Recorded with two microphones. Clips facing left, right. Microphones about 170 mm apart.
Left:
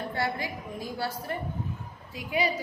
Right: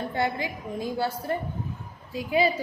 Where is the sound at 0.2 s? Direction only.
20° right (ahead or behind).